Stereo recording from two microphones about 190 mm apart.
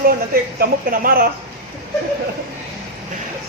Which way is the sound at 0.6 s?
50° right (ahead or behind).